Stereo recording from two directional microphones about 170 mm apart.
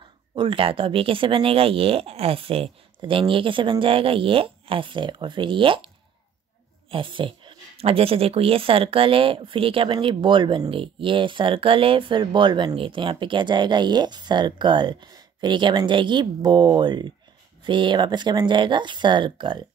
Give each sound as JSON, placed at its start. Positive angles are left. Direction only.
{"t": 0.3, "sound": "speech", "side_deg": -30}
{"t": 6.9, "sound": "speech", "side_deg": -30}